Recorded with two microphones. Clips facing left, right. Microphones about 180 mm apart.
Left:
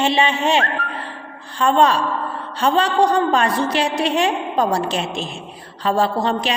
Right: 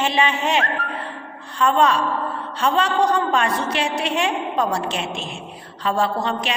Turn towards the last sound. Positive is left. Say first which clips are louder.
# left 3 dB
turn(degrees=35)  # may be behind; listen again after turning